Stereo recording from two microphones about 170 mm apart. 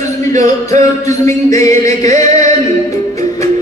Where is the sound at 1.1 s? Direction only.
20° left (ahead or behind).